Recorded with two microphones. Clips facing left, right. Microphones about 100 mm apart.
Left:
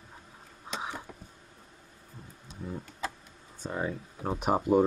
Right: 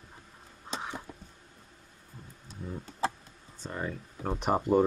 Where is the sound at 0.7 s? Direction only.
10° left (ahead or behind).